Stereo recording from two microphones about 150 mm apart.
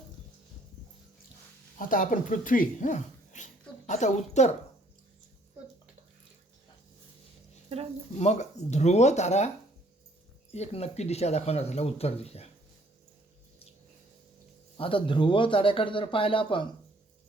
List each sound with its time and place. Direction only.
1.9 s speech: 60° left (ahead or behind)
8.2 s speech: 50° left (ahead or behind)
10.5 s speech: 45° left (ahead or behind)
14.8 s speech: 35° left (ahead or behind)